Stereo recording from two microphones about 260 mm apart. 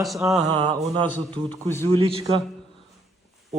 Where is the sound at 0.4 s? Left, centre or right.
Centre.